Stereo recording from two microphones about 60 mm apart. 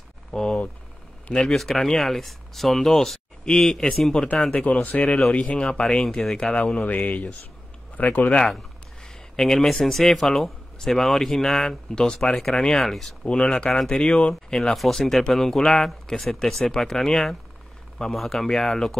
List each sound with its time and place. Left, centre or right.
0.3 s speech: centre
4.6 s speech: left
6.5 s speech: left
9.0 s speech: centre
13.2 s speech: centre